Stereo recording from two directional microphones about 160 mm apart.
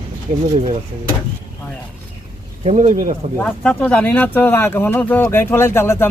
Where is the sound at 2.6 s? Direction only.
45° right (ahead or behind).